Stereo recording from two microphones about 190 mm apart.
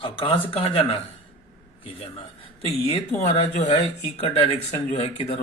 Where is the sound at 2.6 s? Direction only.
30° left (ahead or behind).